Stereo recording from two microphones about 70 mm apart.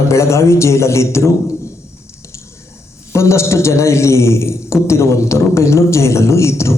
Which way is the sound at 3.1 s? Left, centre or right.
Left.